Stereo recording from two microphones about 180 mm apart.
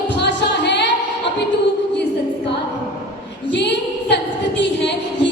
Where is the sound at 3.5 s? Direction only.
70° left (ahead or behind).